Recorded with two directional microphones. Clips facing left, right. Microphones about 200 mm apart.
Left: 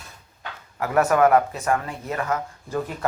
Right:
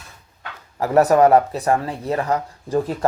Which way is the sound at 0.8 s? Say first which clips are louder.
Right 4 dB; 35° right (ahead or behind).